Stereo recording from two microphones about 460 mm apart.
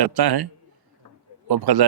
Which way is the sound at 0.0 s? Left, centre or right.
Right.